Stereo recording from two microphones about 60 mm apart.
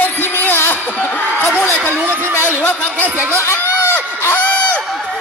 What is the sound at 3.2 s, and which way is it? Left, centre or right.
Speech, right.